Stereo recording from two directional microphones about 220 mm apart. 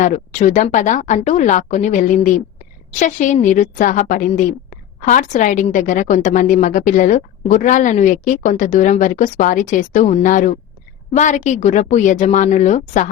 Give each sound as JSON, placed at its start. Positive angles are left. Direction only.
{"t": 0.0, "sound": "a woman's voice", "side_deg": 35}